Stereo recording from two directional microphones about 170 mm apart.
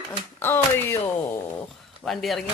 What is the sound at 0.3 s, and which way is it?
Speech, 15° left (ahead or behind).